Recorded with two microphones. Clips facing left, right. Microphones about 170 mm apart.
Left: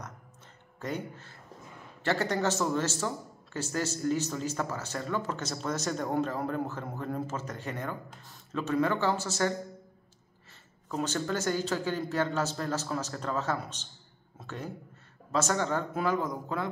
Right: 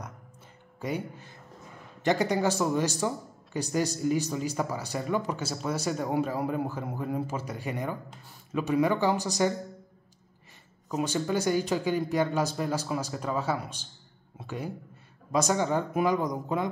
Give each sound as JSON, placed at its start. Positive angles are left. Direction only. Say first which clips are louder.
{"t": 0.7, "sound": "speech", "louder": "right 3 dB", "side_deg": -10}
{"t": 10.9, "sound": "speech", "louder": "right 3 dB", "side_deg": -10}